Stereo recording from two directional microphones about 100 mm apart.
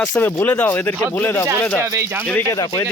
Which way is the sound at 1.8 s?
30° right (ahead or behind).